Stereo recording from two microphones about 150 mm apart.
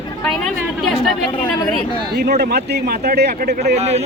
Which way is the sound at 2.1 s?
90° right.